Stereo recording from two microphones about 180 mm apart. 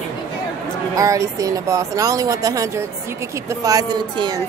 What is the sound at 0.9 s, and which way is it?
Speech, 20° right (ahead or behind).